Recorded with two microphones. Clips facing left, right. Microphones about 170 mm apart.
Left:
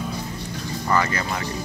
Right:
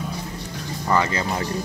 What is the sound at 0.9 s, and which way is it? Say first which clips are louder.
Speech: right 1 dB; 25° right (ahead or behind).